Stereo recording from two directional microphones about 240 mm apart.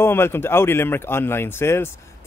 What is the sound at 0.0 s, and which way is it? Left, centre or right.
Speech, centre.